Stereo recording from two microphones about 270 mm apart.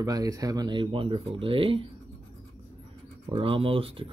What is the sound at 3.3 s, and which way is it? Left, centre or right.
Speech, centre.